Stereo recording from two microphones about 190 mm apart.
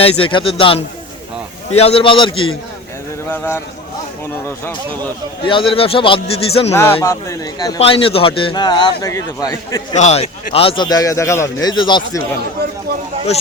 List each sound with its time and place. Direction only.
0.0 s a man's voice: 25° left (ahead or behind)
3.2 s speech: 10° left (ahead or behind)
5.5 s a man's voice: 25° left (ahead or behind)
7.0 s a man's voice: 15° left (ahead or behind)
9.9 s a man's voice: 35° left (ahead or behind)
12.9 s a sound: 55° right (ahead or behind)